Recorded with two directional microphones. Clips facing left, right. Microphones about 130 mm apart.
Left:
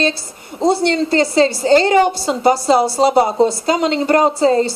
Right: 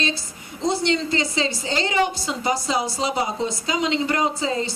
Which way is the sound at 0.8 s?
50° left (ahead or behind).